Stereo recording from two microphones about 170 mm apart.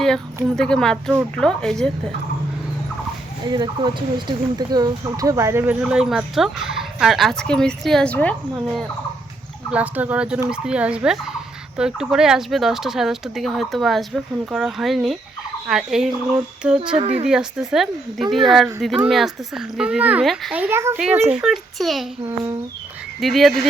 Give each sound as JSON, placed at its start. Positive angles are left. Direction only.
{"t": 0.5, "sound": "speech", "side_deg": 5}
{"t": 3.4, "sound": "speech", "side_deg": -25}
{"t": 8.5, "sound": "speech", "side_deg": -5}
{"t": 9.7, "sound": "fowl", "side_deg": -10}
{"t": 11.8, "sound": "speech", "side_deg": -5}
{"t": 16.9, "sound": "speech", "side_deg": -40}
{"t": 17.2, "sound": "speech", "side_deg": -5}
{"t": 23.2, "sound": "speech", "side_deg": 0}